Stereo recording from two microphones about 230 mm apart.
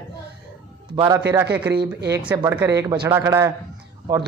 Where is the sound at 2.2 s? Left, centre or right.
Centre.